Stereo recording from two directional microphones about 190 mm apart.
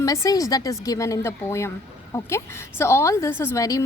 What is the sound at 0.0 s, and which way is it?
A woman's voice, 15° left (ahead or behind).